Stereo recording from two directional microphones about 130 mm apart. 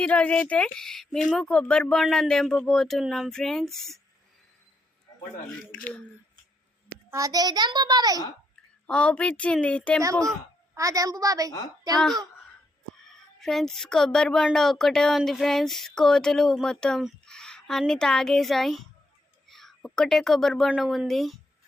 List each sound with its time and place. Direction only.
0.0 s speech: 10° left (ahead or behind)
6.8 s a child's voice: 25° right (ahead or behind)
8.9 s a woman's voice: 10° left (ahead or behind)
10.8 s a woman's voice: 25° right (ahead or behind)
13.4 s speech: 5° left (ahead or behind)